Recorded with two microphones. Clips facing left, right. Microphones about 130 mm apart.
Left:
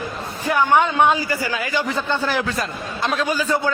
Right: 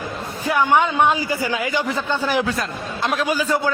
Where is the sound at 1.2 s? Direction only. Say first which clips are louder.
Right 1 dB; 20° right (ahead or behind).